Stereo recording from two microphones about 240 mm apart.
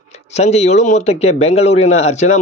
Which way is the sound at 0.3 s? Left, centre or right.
Left.